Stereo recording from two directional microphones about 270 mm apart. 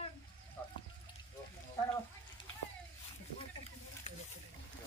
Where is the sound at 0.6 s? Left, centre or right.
Centre.